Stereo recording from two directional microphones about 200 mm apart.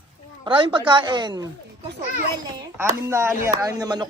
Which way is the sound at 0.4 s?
25° right (ahead or behind).